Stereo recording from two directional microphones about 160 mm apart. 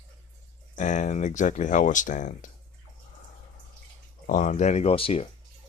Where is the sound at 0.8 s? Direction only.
50° left (ahead or behind).